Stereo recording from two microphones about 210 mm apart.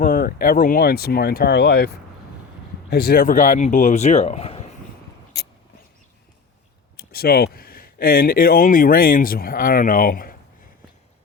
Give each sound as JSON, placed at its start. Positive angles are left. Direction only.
{"t": 0.0, "sound": "speech", "side_deg": 40}
{"t": 6.9, "sound": "speech", "side_deg": 45}